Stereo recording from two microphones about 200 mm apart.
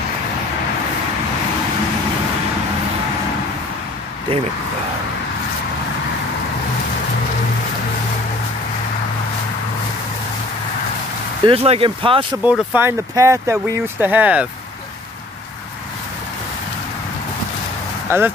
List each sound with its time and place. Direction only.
11.4 s speech: 30° right (ahead or behind)
12.4 s speech: 10° right (ahead or behind)
18.1 s speech: 10° right (ahead or behind)